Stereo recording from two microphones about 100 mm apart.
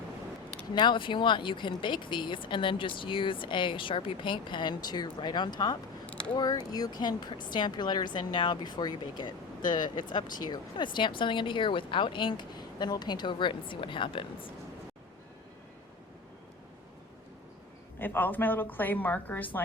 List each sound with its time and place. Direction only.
0.7 s speech: 50° left (ahead or behind)
6.1 s a sound: 10° left (ahead or behind)
6.3 s speech: 45° left (ahead or behind); by 14.3 s 60° left (ahead or behind)
18.0 s a woman's voice: 20° left (ahead or behind)